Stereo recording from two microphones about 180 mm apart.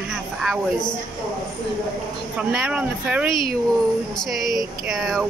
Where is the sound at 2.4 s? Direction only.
5° right (ahead or behind).